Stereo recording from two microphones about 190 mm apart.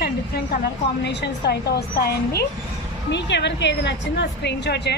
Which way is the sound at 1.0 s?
60° left (ahead or behind).